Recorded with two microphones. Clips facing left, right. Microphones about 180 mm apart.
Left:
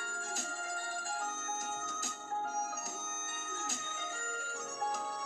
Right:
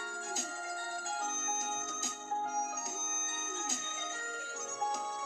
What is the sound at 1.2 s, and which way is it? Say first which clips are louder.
Music: right 1 dB; 20° right (ahead or behind).